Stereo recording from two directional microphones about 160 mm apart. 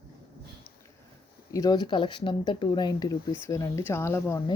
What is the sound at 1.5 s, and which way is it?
Speech, 25° left (ahead or behind).